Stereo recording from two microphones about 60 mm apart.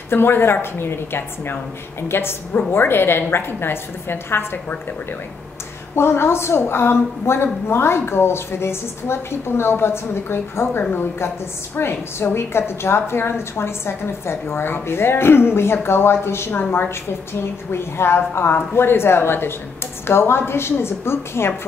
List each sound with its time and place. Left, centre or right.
0.1 s a woman's voice: left
5.9 s a woman's voice: left